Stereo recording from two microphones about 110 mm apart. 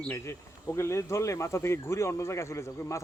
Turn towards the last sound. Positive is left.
turn(degrees=25)  # may be behind; listen again after turning